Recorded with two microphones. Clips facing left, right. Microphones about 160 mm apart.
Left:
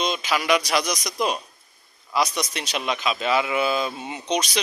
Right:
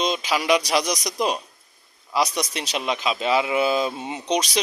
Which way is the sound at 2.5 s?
25° right (ahead or behind).